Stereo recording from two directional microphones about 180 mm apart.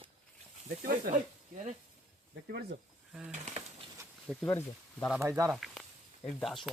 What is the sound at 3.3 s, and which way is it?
Speech, 40° right (ahead or behind).